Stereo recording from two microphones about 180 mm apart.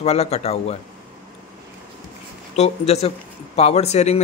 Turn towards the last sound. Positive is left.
turn(degrees=35)  # may be behind; listen again after turning